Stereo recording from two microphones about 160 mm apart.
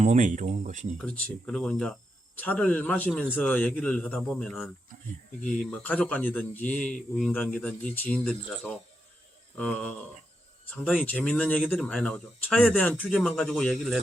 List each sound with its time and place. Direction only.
0.0 s speech: 50° right (ahead or behind)
0.9 s a man's voice: 5° left (ahead or behind)